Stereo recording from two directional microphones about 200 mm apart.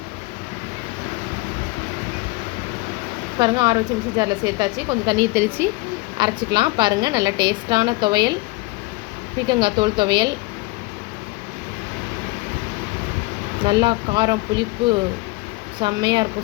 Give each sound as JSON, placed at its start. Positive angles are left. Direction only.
{"t": 3.3, "sound": "a woman's voice", "side_deg": -20}
{"t": 5.3, "sound": "speech", "side_deg": -10}
{"t": 6.1, "sound": "a woman's voice", "side_deg": -25}
{"t": 9.5, "sound": "a woman's voice", "side_deg": -25}
{"t": 13.6, "sound": "a woman's voice", "side_deg": -25}